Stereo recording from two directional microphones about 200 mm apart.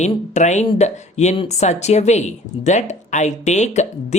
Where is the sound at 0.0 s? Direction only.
35° left (ahead or behind).